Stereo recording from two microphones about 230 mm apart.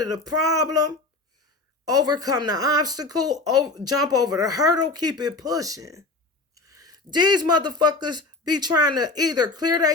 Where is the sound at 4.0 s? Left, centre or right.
Centre.